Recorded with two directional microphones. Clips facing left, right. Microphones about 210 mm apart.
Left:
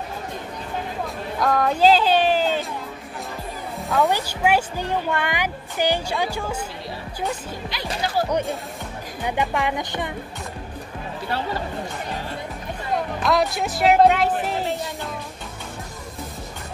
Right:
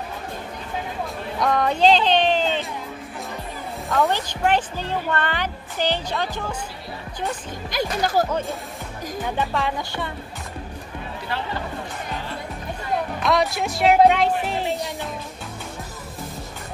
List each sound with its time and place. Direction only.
1.4 s speech: centre (ahead or behind)
4.1 s a woman's voice: 10° left (ahead or behind)
7.7 s speech: 45° right (ahead or behind)
9.2 s a woman's voice: 15° left (ahead or behind)
13.2 s speech: centre (ahead or behind)